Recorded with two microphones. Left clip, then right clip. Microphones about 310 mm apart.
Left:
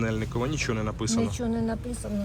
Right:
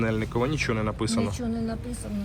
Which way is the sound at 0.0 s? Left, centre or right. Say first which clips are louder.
Right 3 dB; centre.